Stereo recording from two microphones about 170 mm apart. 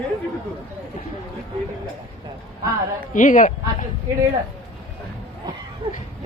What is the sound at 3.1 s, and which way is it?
Speech, 50° left (ahead or behind).